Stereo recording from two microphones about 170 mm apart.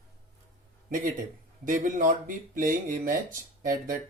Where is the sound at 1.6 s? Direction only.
50° right (ahead or behind).